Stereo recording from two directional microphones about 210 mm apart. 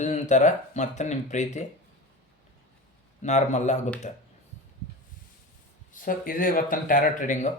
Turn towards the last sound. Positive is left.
turn(degrees=35)  # may be behind; listen again after turning